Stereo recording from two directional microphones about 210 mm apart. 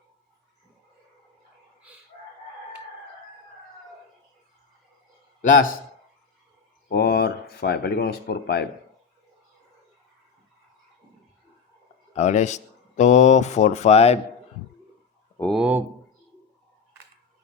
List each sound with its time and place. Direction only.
5.4 s a man's voice: 40° left (ahead or behind)
6.8 s a sound: 50° left (ahead or behind)
12.1 s speech: 35° left (ahead or behind)
15.4 s speech: centre (ahead or behind)